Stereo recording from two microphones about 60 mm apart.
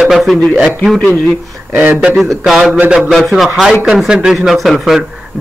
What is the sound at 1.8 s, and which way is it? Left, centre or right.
Speech, right.